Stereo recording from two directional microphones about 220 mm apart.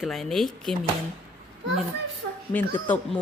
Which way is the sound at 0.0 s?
Centre (ahead or behind).